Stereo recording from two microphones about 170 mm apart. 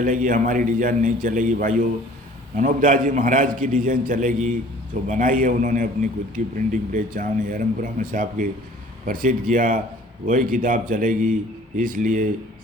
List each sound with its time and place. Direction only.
0.0 s a man's voice: 50° right (ahead or behind)